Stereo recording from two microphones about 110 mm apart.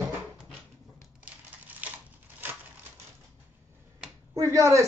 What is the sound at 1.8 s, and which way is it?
Crushing, 15° right (ahead or behind).